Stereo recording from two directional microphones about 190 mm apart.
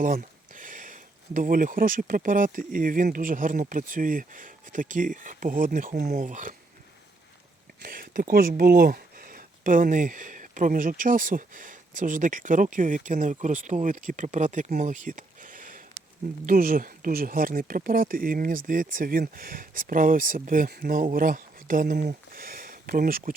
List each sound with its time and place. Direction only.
0.0 s speech: 45° right (ahead or behind)
7.8 s speech: 50° right (ahead or behind)